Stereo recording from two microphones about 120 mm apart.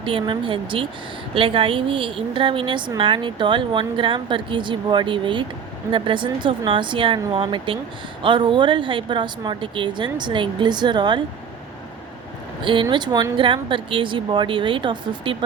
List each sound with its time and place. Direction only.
0.0 s a woman's voice: 45° right (ahead or behind)
12.6 s a woman's voice: 45° right (ahead or behind)